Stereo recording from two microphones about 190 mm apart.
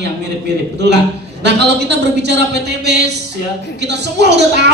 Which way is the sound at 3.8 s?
65° right (ahead or behind).